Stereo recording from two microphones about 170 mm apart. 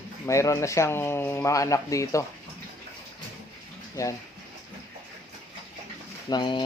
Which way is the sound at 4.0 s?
20° left (ahead or behind).